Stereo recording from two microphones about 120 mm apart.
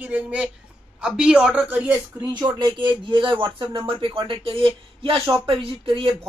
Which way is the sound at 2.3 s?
35° right (ahead or behind).